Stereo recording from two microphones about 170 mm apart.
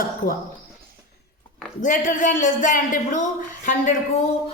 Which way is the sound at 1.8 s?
50° left (ahead or behind).